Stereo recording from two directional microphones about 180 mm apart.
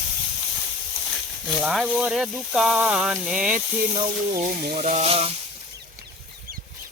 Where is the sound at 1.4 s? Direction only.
Centre (ahead or behind).